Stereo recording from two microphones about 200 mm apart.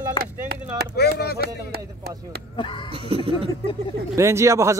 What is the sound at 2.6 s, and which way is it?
Speech, 25° left (ahead or behind).